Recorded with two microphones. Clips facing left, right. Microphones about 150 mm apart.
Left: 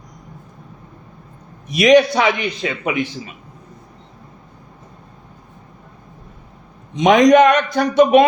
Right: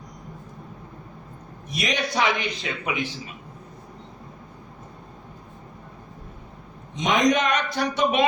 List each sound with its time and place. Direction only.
1.7 s a man's voice: 80° left
2.6 s a man's voice: 65° left (ahead or behind)
6.9 s a man's voice: 70° left (ahead or behind); by 8.2 s 50° left (ahead or behind)